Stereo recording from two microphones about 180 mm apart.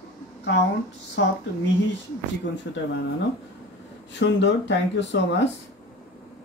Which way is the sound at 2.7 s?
70° left (ahead or behind).